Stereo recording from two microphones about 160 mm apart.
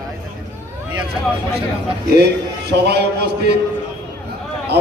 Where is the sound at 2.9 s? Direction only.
90° right.